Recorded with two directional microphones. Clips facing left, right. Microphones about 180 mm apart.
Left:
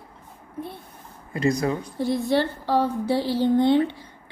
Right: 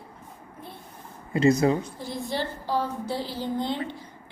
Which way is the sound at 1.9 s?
65° left (ahead or behind).